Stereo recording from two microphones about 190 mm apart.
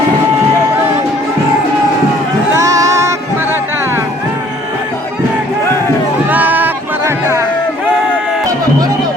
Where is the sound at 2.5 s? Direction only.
15° right (ahead or behind).